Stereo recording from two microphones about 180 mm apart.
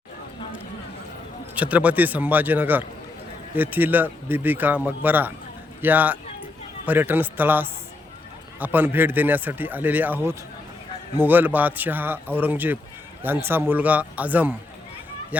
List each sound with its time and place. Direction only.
1.5 s a man's voice: 10° right (ahead or behind)